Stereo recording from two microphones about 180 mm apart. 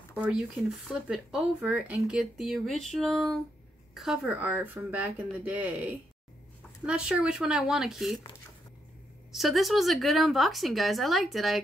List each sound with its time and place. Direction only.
0.2 s speech: centre (ahead or behind)
9.3 s speech: centre (ahead or behind)